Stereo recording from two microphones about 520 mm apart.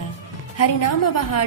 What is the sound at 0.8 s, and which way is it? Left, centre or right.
Speech, left.